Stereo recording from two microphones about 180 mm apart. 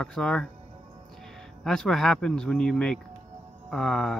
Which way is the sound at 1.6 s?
5° left (ahead or behind).